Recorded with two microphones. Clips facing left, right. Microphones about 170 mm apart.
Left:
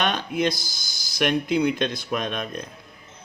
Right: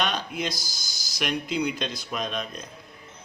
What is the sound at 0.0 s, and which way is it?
Speech, 55° left (ahead or behind).